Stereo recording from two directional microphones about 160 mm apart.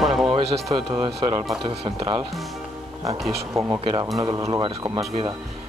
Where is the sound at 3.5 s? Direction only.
20° right (ahead or behind).